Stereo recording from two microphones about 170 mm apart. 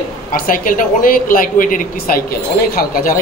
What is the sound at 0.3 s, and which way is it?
Speech, 55° left (ahead or behind).